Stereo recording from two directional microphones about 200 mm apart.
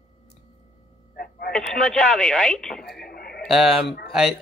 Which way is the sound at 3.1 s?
50° left (ahead or behind).